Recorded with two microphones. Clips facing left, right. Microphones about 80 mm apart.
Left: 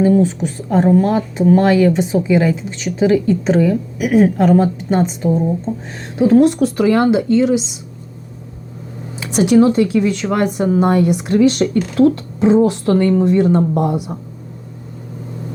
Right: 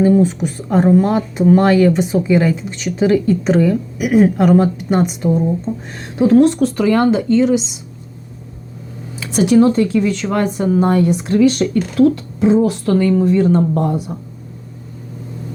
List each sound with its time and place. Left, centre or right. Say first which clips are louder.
0.0 s a woman's voice: right 1 dB; centre
6.2 s speech: even; centre
9.2 s a woman's voice: even; left